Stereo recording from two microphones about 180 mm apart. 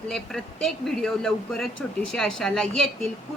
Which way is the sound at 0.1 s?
Centre (ahead or behind).